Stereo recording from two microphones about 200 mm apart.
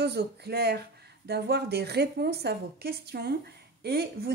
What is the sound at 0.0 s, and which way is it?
Speech, 55° right (ahead or behind).